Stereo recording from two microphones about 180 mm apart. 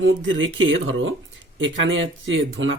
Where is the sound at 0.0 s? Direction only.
90° right.